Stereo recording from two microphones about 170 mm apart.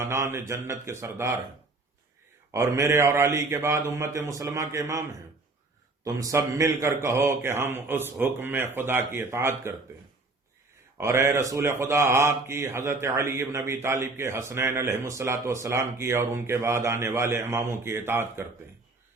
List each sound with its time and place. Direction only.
0.0 s a man's voice: 15° right (ahead or behind)
2.5 s a man's voice: 15° right (ahead or behind)
6.1 s a man's voice: 20° right (ahead or behind)
10.9 s a man's voice: 15° right (ahead or behind)